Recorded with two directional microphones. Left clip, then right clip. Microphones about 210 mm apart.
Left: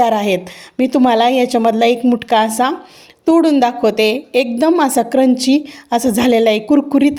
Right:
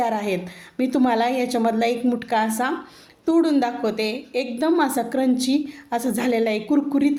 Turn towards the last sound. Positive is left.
turn(degrees=35)  # may be behind; listen again after turning